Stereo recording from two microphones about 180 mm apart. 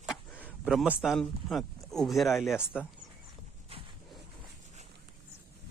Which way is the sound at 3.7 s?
35° right (ahead or behind).